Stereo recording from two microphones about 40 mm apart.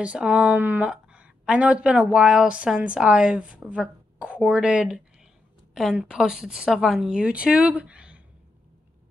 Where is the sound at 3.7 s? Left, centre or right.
Right.